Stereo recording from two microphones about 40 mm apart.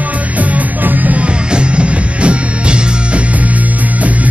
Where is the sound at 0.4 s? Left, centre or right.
Right.